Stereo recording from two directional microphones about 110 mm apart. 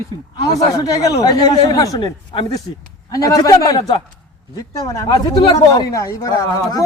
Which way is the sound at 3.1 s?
35° left (ahead or behind).